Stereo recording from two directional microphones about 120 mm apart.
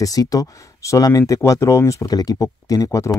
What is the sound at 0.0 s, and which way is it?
Speech, 30° left (ahead or behind).